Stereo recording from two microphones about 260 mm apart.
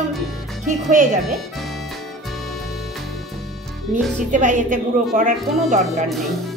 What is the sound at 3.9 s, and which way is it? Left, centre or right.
Speech, centre.